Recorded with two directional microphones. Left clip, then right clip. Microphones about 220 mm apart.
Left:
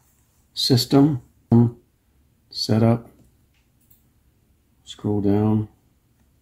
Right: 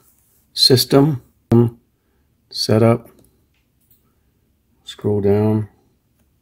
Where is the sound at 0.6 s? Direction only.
50° right (ahead or behind).